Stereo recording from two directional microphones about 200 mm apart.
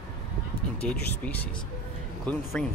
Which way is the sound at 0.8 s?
5° left (ahead or behind).